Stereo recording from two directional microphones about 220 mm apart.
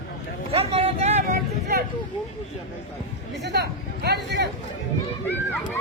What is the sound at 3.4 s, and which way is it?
Speech, 50° right (ahead or behind).